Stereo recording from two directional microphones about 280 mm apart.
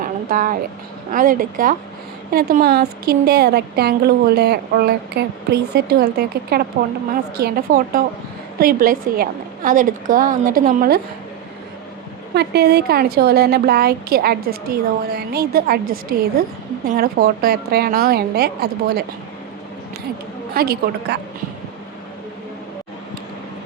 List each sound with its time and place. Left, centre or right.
0.0 s a sound: right
1.1 s a woman's voice: right
12.3 s a woman's voice: right
20.5 s a woman's voice: right